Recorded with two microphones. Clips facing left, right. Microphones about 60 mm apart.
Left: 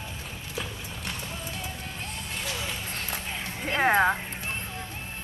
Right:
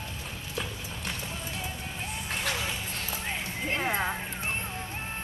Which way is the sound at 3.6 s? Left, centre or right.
Left.